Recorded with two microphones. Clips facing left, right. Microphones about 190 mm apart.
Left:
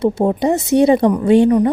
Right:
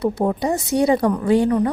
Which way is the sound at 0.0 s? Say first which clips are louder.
Left 5 dB; 25° left (ahead or behind).